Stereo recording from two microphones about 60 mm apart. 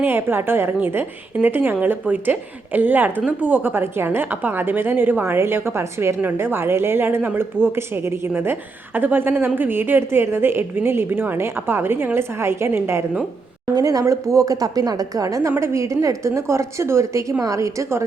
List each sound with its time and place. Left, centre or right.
0.0 s a woman's voice: right
13.7 s speech: right
14.0 s a woman's voice: right
15.5 s a woman's voice: right